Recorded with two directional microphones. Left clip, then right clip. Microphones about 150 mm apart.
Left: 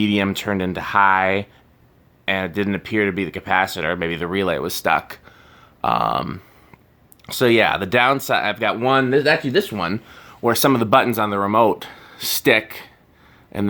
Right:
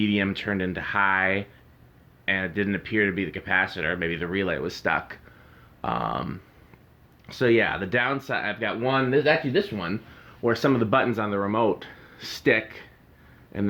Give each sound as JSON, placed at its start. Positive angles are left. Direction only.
{"t": 0.0, "sound": "speech", "side_deg": 40}
{"t": 7.3, "sound": "speech", "side_deg": 45}
{"t": 10.2, "sound": "speech", "side_deg": 35}